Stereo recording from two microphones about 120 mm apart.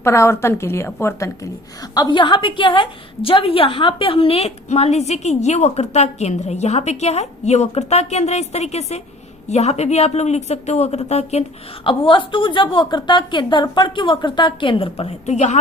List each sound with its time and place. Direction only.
0.0 s a woman's voice: 25° left (ahead or behind); by 11.9 s 65° left (ahead or behind)
11.9 s a woman's voice: 45° left (ahead or behind); by 15.5 s 75° left (ahead or behind)